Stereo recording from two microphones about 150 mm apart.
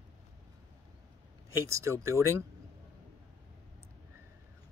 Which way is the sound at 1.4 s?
20° right (ahead or behind).